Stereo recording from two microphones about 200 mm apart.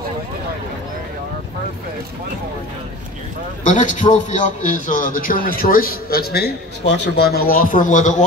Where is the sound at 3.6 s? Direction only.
40° left (ahead or behind).